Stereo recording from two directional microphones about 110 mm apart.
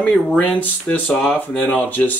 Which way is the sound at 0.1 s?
5° left (ahead or behind).